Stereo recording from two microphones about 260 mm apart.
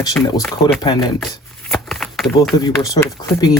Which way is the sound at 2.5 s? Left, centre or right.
Centre.